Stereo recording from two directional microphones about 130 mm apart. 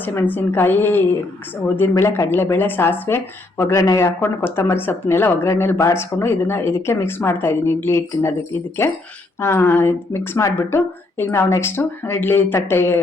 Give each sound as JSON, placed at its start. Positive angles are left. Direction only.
{"t": 0.0, "sound": "speech", "side_deg": 15}